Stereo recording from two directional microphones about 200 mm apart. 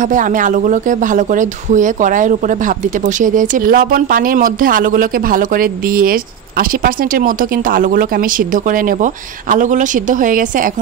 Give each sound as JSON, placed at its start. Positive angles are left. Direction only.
{"t": 0.1, "sound": "speech", "side_deg": -40}